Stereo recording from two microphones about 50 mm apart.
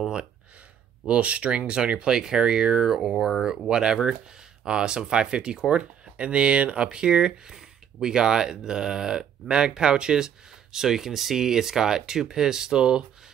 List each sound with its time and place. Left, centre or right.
1.0 s speech: right